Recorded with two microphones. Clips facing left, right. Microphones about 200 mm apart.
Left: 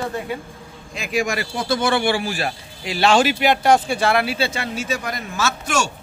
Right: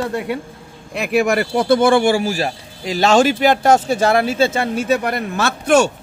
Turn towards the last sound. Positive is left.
turn(degrees=-60)  # may be behind; listen again after turning